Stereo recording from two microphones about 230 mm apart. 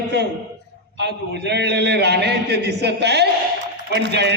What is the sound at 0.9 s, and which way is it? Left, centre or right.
A man's voice, right.